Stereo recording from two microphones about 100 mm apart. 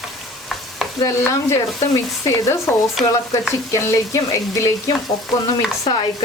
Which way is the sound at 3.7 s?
30° left (ahead or behind).